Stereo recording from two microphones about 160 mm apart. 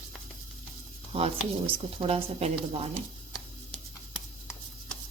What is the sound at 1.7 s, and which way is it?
Speech, 35° right (ahead or behind).